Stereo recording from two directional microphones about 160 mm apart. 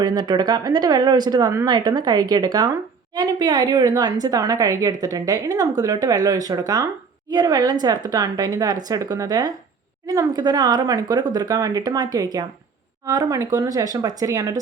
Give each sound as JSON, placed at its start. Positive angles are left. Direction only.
{"t": 0.0, "sound": "a woman's voice", "side_deg": -25}